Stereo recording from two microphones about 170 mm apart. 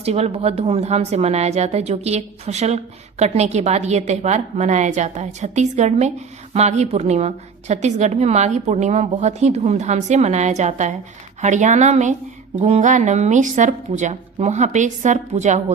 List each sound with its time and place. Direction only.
0.0 s a woman's voice: 40° right (ahead or behind)